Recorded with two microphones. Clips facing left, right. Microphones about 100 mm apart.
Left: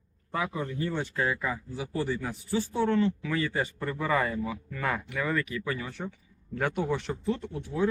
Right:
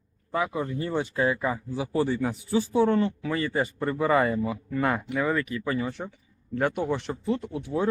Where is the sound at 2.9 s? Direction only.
45° right (ahead or behind).